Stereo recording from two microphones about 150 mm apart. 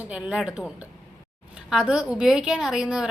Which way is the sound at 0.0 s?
10° right (ahead or behind).